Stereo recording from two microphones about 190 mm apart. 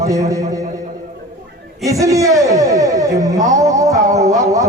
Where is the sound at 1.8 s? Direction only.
15° right (ahead or behind).